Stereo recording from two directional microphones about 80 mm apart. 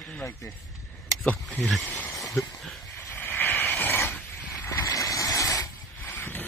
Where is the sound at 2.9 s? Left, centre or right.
Left.